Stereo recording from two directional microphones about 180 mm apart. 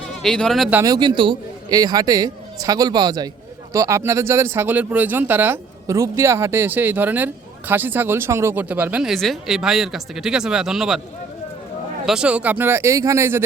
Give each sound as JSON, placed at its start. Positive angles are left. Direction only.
{"t": 0.2, "sound": "speech", "side_deg": 5}
{"t": 0.7, "sound": "speech", "side_deg": -15}
{"t": 12.0, "sound": "speech", "side_deg": -5}